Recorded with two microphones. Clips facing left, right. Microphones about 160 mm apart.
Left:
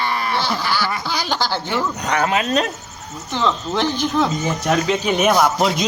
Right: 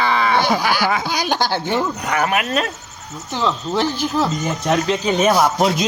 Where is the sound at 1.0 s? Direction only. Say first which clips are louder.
Right 2 dB; 20° right (ahead or behind).